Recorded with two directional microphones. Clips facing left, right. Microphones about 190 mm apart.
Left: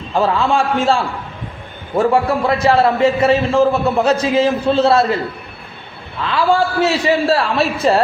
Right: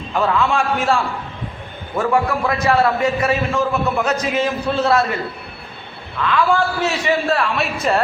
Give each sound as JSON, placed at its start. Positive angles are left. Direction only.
{"t": 0.1, "sound": "a man's voice", "side_deg": 30}
{"t": 2.0, "sound": "a man's voice", "side_deg": 35}
{"t": 6.2, "sound": "a man's voice", "side_deg": 30}